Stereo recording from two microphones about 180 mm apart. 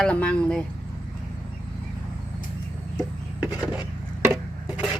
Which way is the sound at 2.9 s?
5° right (ahead or behind).